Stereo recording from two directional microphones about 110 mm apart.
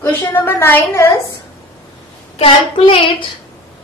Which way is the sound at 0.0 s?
20° left (ahead or behind).